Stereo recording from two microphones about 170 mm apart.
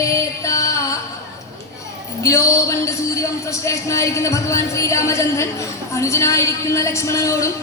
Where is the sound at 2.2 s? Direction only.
20° left (ahead or behind).